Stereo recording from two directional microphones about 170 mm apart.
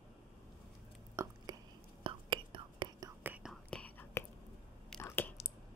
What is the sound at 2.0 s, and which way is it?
Whispering, 30° right (ahead or behind).